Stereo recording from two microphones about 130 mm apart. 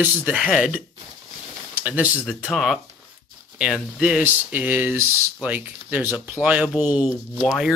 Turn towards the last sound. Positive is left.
turn(degrees=-5)  # may be behind; listen again after turning